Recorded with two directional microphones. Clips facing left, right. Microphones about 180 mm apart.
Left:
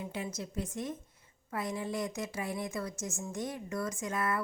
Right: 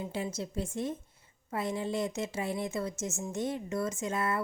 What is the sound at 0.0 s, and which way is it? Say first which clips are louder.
A woman's voice: right 3 dB; 30° right (ahead or behind).